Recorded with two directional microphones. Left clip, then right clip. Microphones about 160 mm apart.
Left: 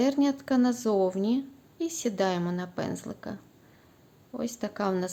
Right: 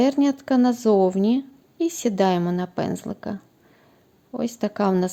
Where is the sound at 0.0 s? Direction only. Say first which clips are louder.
Right 6 dB; 40° right (ahead or behind).